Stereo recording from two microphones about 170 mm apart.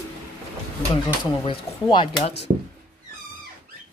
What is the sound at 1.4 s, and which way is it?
Speech, 30° left (ahead or behind).